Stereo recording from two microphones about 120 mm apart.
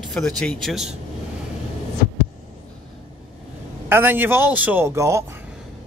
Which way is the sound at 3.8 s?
20° right (ahead or behind).